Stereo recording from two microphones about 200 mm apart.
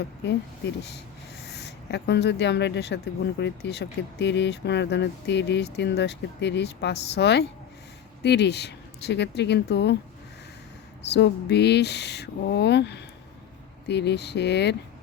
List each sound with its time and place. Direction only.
1.5 s speech: 60° left (ahead or behind)
11.0 s speech: 60° left (ahead or behind)